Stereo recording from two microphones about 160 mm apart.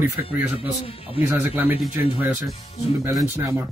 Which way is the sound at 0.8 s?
35° left (ahead or behind).